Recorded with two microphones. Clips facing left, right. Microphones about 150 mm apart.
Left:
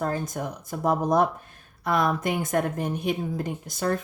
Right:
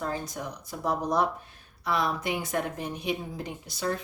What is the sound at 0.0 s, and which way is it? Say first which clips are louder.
A woman's voice: left 5 dB; 50° left (ahead or behind).